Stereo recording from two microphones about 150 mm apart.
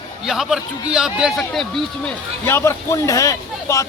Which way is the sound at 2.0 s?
15° left (ahead or behind).